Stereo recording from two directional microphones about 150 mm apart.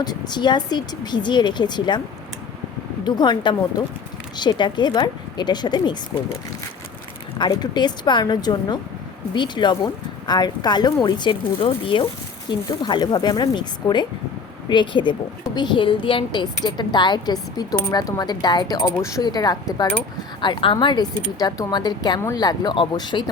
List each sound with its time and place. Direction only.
0.0 s speech: 30° left (ahead or behind)
3.0 s speech: 30° left (ahead or behind)
7.3 s a woman's voice: 30° left (ahead or behind)